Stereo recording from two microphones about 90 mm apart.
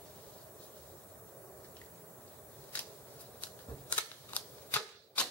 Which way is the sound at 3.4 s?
15° left (ahead or behind).